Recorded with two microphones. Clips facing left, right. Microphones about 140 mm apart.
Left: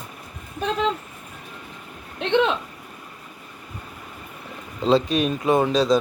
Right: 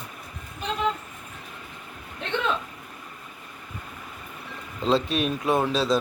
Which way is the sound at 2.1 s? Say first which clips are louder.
Left 9 dB; 80° left.